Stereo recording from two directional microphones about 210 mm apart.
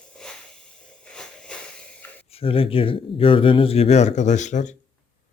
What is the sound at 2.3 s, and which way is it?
Speech, 25° left (ahead or behind).